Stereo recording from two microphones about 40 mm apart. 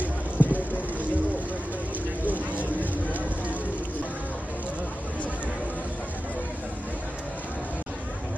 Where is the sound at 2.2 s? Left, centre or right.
Right.